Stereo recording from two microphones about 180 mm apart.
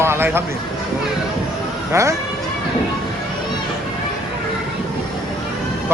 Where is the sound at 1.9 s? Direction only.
15° right (ahead or behind).